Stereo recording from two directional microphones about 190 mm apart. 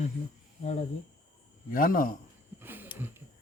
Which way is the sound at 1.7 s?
45° left (ahead or behind).